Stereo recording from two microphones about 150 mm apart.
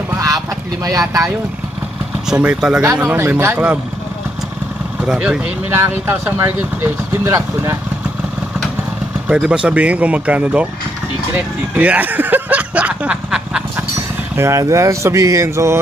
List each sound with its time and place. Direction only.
0.1 s a sound: 20° right (ahead or behind)
0.8 s speech: 20° right (ahead or behind)
2.2 s speech: 5° right (ahead or behind)
5.0 s speech: 5° right (ahead or behind)
9.3 s speech: 5° right (ahead or behind)
11.7 s speech: 10° right (ahead or behind)
14.3 s speech: 20° right (ahead or behind)